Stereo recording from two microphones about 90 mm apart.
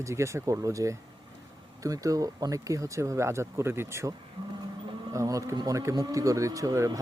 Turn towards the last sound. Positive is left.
turn(degrees=-35)  # may be behind; listen again after turning